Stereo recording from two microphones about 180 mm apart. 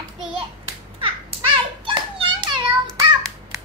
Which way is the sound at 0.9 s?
30° right (ahead or behind).